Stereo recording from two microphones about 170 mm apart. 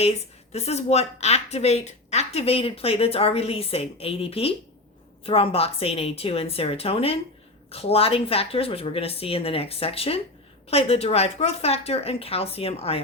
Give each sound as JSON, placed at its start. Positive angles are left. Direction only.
{"t": 0.5, "sound": "a woman's voice", "side_deg": 40}